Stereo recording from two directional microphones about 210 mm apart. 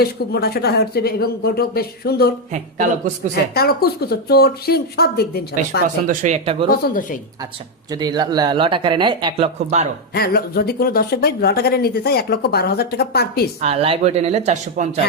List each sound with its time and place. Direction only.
0.0 s speech: 50° left (ahead or behind)
3.5 s speech: 45° left (ahead or behind)
6.1 s speech: 35° right (ahead or behind)
6.7 s speech: 40° left (ahead or behind)
7.9 s speech: 20° right (ahead or behind)
10.2 s speech: 45° left (ahead or behind)
13.6 s speech: 30° right (ahead or behind)